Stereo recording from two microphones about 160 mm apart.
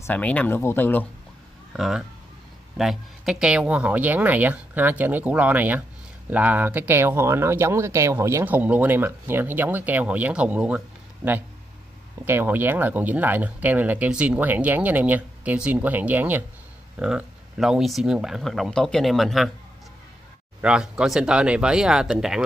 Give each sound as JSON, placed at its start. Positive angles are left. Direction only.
{"t": 0.0, "sound": "speech", "side_deg": 10}
{"t": 1.7, "sound": "speech", "side_deg": 0}
{"t": 12.3, "sound": "speech", "side_deg": -10}
{"t": 20.6, "sound": "speech", "side_deg": -5}